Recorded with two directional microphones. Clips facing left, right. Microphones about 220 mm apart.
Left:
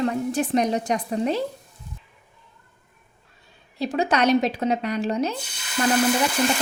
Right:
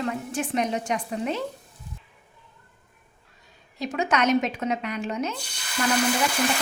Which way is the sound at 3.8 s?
35° left (ahead or behind).